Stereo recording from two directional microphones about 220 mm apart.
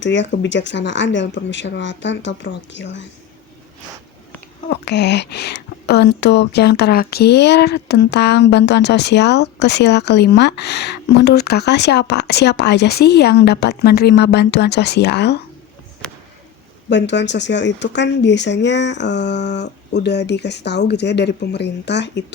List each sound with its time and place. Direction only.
0.0 s speech: 55° left (ahead or behind)
4.7 s speech: 50° left (ahead or behind)
16.9 s speech: 55° left (ahead or behind)